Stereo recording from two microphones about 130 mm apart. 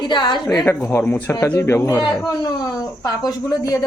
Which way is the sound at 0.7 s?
15° left (ahead or behind).